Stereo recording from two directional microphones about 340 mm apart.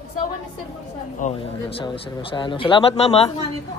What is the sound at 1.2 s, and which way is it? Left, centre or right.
A man's voice, left.